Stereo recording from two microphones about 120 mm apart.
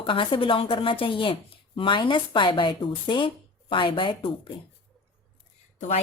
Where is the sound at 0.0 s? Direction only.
45° left (ahead or behind).